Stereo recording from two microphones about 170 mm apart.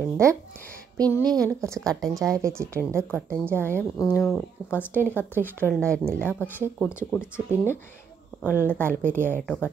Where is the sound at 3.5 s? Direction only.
10° left (ahead or behind).